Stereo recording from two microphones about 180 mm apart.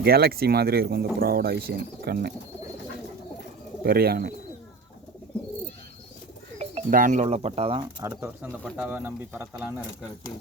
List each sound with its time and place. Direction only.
0.0 s speech: 60° right (ahead or behind)
3.8 s speech: 60° right (ahead or behind)
6.9 s speech: 45° right (ahead or behind)
8.0 s speech: 15° right (ahead or behind)